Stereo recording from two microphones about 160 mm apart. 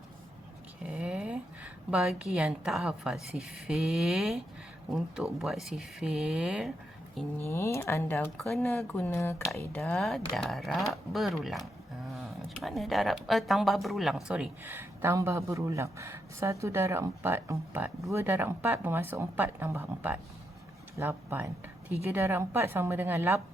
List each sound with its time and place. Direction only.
0.8 s a woman's voice: 5° right (ahead or behind)
7.2 s speech: 15° left (ahead or behind)
8.4 s a woman's voice: centre (ahead or behind); by 23.4 s 15° right (ahead or behind)